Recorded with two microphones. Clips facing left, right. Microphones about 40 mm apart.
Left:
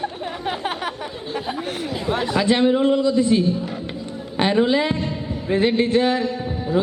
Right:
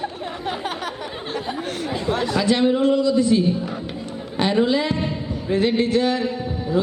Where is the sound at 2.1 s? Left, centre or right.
Left.